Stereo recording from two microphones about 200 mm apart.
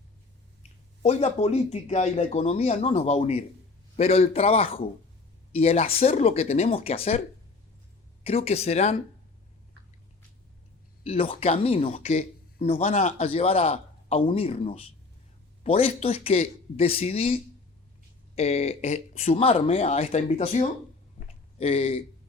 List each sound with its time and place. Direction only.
1.0 s a man's voice: 35° left (ahead or behind)
8.2 s speech: 30° left (ahead or behind)
11.0 s a man's voice: 30° left (ahead or behind)